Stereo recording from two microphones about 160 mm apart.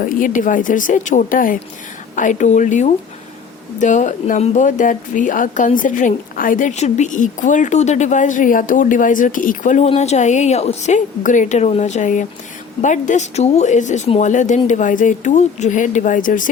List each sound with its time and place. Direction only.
0.2 s speech: 55° left (ahead or behind)